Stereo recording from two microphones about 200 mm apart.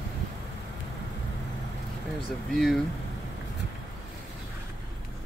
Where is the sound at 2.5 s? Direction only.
Centre (ahead or behind).